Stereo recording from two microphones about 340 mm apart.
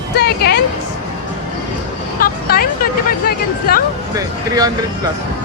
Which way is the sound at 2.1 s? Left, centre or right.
Left.